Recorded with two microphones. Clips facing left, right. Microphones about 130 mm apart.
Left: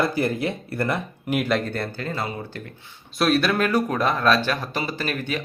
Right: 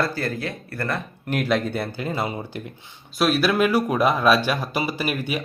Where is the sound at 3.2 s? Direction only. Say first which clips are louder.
Right 1 dB; 5° right (ahead or behind).